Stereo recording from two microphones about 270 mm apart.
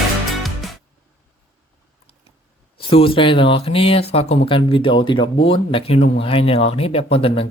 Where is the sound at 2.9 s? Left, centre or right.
Centre.